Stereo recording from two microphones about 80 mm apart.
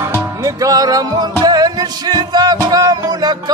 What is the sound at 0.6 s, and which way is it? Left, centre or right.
Music, right.